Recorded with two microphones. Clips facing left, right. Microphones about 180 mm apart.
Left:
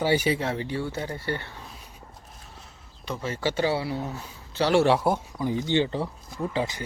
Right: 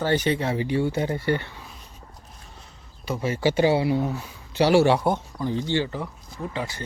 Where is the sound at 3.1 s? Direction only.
10° right (ahead or behind); by 6.1 s 25° left (ahead or behind).